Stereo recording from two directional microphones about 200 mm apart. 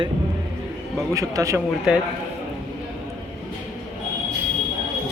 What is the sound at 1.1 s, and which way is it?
Speech, 15° right (ahead or behind).